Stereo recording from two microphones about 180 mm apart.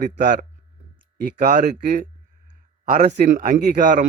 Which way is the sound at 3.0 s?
40° right (ahead or behind).